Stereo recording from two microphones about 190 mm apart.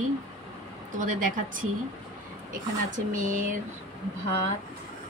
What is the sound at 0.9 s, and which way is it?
Speech, 45° right (ahead or behind).